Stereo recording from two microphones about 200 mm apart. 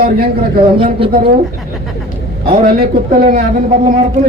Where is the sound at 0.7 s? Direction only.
25° right (ahead or behind).